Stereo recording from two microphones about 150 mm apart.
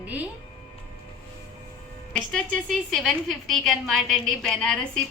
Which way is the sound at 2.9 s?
Centre (ahead or behind).